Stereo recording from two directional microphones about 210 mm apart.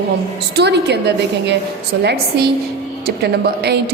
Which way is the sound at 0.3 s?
50° right (ahead or behind).